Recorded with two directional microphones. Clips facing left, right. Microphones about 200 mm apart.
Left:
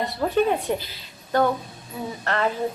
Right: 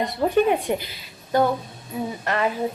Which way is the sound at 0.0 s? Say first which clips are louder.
Right 2 dB; 15° right (ahead or behind).